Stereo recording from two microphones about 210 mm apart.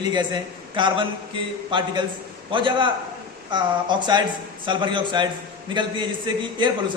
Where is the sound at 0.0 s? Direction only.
20° right (ahead or behind).